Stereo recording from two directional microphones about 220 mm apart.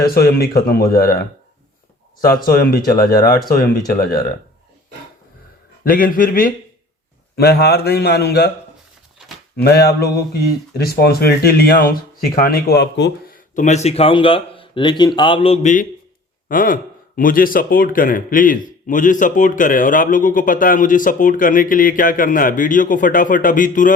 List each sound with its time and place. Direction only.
0.0 s speech: 45° left (ahead or behind)
2.2 s speech: 40° left (ahead or behind)
5.8 s speech: 40° left (ahead or behind)
9.6 s speech: 45° left (ahead or behind)